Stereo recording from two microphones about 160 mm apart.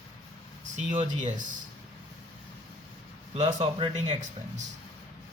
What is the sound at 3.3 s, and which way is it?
Speech, 40° right (ahead or behind).